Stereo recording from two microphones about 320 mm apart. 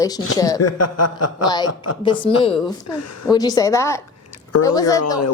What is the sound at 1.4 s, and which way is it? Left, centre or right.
Speech, centre.